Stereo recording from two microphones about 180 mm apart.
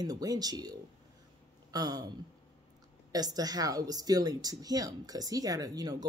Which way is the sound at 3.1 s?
20° right (ahead or behind).